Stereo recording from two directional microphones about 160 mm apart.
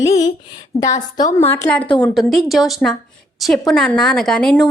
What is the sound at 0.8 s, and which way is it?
A woman's voice, 20° left (ahead or behind).